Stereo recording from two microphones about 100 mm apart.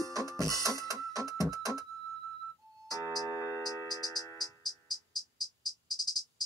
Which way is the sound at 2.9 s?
35° left (ahead or behind).